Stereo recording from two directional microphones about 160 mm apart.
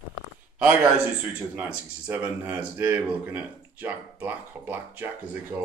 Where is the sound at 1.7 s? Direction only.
10° right (ahead or behind).